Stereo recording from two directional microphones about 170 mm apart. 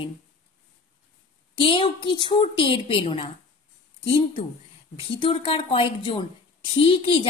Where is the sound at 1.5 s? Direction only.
30° left (ahead or behind).